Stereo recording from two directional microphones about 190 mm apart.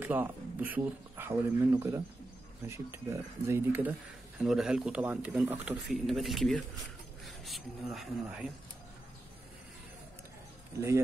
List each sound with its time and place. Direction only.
0.0 s speech: 10° right (ahead or behind)